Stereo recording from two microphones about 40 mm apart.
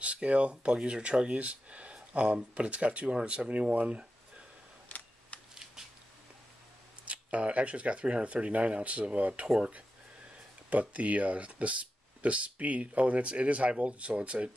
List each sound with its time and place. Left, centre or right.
0.0 s speech: right
4.8 s camera: left
5.5 s shuffling cards: centre
7.1 s speech: right